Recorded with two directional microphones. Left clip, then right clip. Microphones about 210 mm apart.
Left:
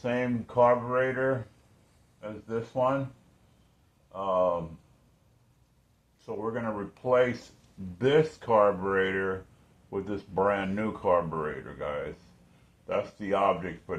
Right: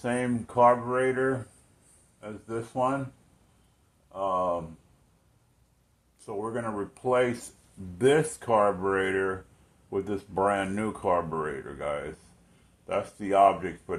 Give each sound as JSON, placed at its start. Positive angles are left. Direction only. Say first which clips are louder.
{"t": 0.0, "sound": "speech", "louder": "even", "side_deg": -40}
{"t": 4.1, "sound": "speech", "louder": "left 1 dB", "side_deg": -35}
{"t": 6.2, "sound": "speech", "louder": "even", "side_deg": -35}